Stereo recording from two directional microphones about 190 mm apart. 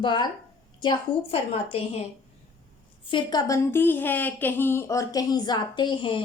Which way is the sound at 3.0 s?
25° left (ahead or behind).